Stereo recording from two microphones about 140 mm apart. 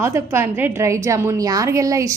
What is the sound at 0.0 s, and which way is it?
A woman's voice, 20° right (ahead or behind).